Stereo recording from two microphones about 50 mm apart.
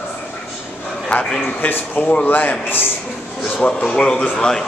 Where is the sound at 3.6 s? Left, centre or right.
Centre.